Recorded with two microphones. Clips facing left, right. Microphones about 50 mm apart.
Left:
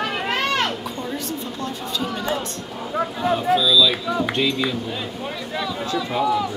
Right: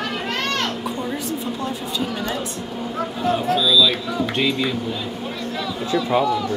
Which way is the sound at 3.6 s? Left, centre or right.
Centre.